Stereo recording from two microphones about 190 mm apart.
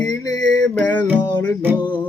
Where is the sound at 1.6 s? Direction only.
10° right (ahead or behind).